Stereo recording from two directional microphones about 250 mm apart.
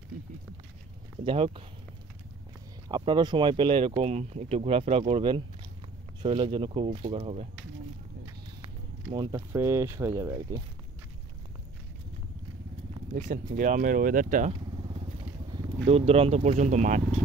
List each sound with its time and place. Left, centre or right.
1.2 s speech: right
2.9 s speech: centre
9.1 s speech: centre
13.1 s speech: right
15.5 s speech: centre